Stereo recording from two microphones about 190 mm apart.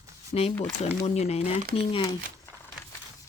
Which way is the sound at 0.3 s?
35° left (ahead or behind).